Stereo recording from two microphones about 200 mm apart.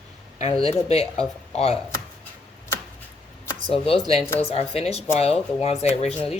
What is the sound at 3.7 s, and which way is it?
A woman's voice, 30° left (ahead or behind).